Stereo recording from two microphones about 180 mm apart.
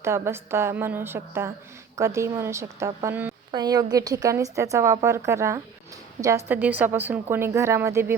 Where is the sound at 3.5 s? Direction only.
20° right (ahead or behind).